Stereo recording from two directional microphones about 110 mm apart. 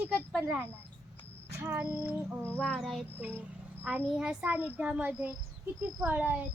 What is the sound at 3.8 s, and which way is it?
A child's voice, 15° right (ahead or behind).